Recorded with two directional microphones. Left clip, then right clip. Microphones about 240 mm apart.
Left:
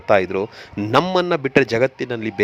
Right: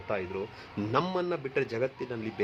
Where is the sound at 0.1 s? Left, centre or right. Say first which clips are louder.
Left 17 dB; left.